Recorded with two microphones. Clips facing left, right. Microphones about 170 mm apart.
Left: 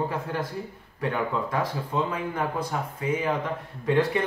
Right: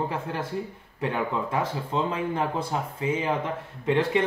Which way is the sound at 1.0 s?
25° right (ahead or behind).